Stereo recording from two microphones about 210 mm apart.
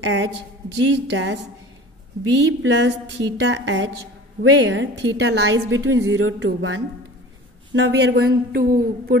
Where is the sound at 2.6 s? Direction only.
60° right (ahead or behind).